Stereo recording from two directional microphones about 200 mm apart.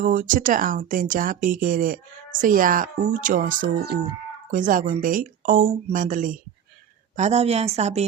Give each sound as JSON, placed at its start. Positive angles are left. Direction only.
{"t": 0.0, "sound": "a woman's voice", "side_deg": -40}